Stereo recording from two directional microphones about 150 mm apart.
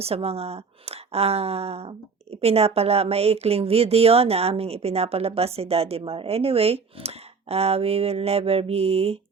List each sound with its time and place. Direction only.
0.0 s speech: 40° right (ahead or behind)